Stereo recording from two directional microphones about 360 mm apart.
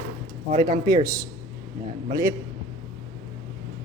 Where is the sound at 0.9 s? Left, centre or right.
Centre.